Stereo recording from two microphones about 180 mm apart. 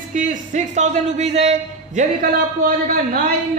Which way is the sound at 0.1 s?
45° right (ahead or behind).